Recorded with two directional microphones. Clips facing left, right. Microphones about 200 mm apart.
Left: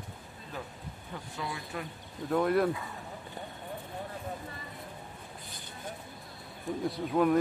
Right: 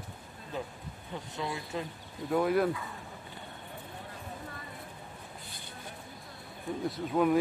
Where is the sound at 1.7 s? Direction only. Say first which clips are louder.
Right 3 dB; 20° right (ahead or behind).